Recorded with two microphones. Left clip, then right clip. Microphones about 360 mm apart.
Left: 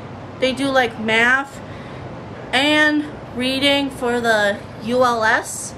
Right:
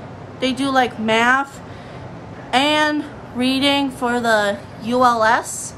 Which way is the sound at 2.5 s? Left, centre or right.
Centre.